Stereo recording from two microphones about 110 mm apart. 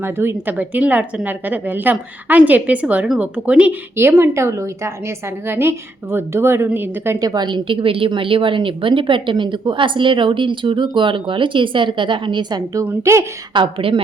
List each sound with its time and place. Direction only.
0.0 s a woman's voice: 20° right (ahead or behind)
7.2 s a woman's voice: 35° right (ahead or behind)
12.8 s a woman's voice: 25° right (ahead or behind)
13.5 s a woman's voice: 50° right (ahead or behind)